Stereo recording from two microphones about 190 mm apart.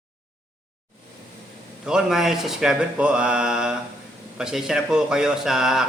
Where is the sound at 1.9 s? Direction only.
5° right (ahead or behind).